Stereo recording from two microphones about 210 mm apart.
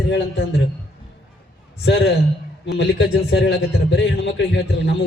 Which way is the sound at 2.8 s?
55° left (ahead or behind).